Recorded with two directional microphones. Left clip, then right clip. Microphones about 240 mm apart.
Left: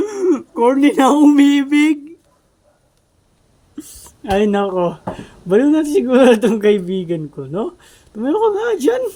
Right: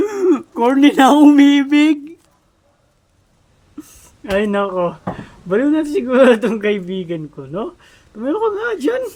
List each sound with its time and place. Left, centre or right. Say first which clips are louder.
0.0 s speech: right 1 dB; centre
3.8 s speech: left 2 dB; centre